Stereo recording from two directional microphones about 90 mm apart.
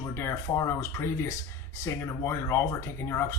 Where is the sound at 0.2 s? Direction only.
30° left (ahead or behind).